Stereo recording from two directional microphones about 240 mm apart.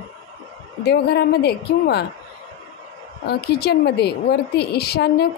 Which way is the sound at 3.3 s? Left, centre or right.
Left.